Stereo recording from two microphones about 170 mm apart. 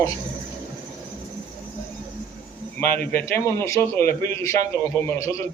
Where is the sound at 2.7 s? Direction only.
10° left (ahead or behind).